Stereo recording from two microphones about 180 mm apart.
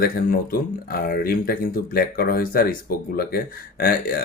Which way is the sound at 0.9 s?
55° left (ahead or behind).